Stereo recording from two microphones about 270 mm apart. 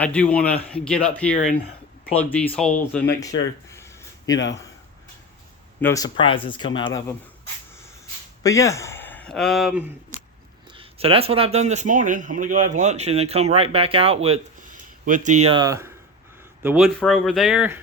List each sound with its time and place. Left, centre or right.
0.0 s speech: centre
3.7 s a sound: centre
5.8 s speech: centre
8.4 s speech: centre
10.7 s speech: right; by 17.7 s centre